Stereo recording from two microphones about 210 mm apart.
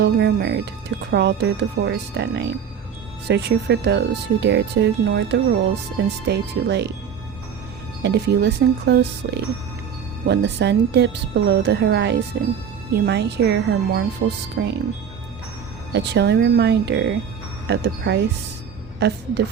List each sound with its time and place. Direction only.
0.0 s speech: 50° right (ahead or behind)
8.0 s speech: 55° right (ahead or behind)
15.9 s speech: 55° right (ahead or behind)